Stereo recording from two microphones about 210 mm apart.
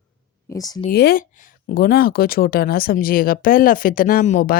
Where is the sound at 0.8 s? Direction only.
45° left (ahead or behind).